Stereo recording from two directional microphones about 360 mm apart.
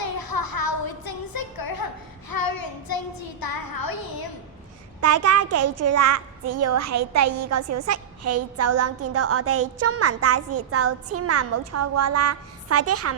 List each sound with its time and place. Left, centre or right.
0.0 s a sound: left
2.3 s child singing: left
4.9 s a child's voice: right